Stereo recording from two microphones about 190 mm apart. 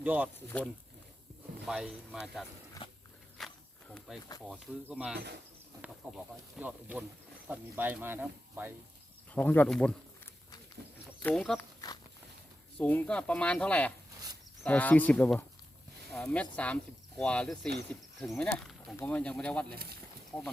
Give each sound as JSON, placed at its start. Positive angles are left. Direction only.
{"t": 0.0, "sound": "speech", "side_deg": -10}
{"t": 0.3, "sound": "speech", "side_deg": 10}
{"t": 1.6, "sound": "speech", "side_deg": -5}
{"t": 2.8, "sound": "walk", "side_deg": 25}
{"t": 3.3, "sound": "insect", "side_deg": 5}
{"t": 4.4, "sound": "speech", "side_deg": -5}
{"t": 9.3, "sound": "speech", "side_deg": 10}
{"t": 11.2, "sound": "speech", "side_deg": 5}
{"t": 12.8, "sound": "speech", "side_deg": 10}